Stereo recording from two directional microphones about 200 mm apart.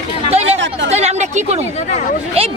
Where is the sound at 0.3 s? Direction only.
30° right (ahead or behind).